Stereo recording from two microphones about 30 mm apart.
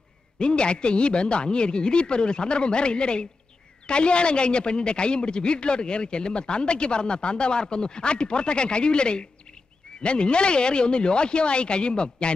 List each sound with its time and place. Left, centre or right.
0.4 s speech: left